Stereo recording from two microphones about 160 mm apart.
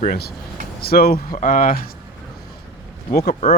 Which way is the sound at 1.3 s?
55° left (ahead or behind).